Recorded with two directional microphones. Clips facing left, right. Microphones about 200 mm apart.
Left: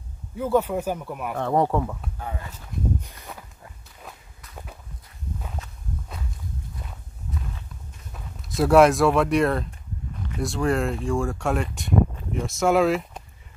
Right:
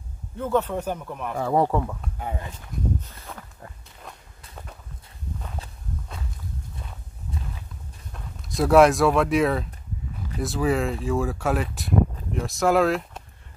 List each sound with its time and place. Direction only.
0.4 s speech: 10° left (ahead or behind)
2.1 s speech: 20° right (ahead or behind)
3.0 s speech: 15° left (ahead or behind)
8.1 s speech: centre (ahead or behind)